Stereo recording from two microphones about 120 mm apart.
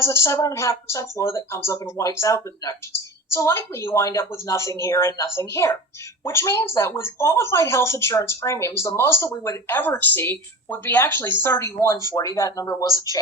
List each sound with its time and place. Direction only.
0.0 s speech: 25° left (ahead or behind)